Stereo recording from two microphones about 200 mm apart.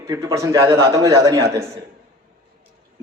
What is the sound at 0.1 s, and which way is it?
A man's voice, 15° right (ahead or behind).